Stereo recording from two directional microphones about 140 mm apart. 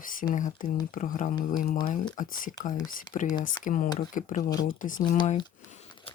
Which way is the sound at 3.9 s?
60° left (ahead or behind).